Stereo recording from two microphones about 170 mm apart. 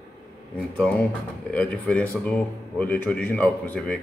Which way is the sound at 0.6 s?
5° left (ahead or behind).